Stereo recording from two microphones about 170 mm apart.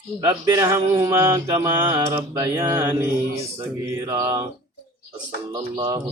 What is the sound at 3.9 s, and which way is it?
Speech, 15° right (ahead or behind).